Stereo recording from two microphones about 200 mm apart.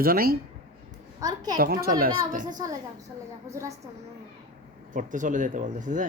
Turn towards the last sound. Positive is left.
turn(degrees=-40)  # may be behind; listen again after turning